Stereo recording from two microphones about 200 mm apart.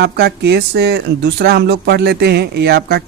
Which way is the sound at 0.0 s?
55° right (ahead or behind).